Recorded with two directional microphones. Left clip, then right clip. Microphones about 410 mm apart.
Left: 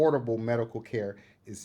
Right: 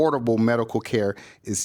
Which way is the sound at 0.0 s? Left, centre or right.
Right.